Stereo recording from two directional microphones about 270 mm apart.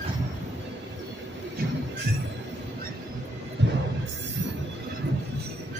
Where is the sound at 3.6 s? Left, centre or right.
Right.